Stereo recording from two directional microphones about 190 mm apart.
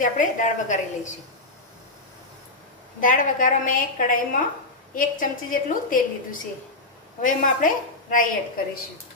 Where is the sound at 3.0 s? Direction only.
45° left (ahead or behind).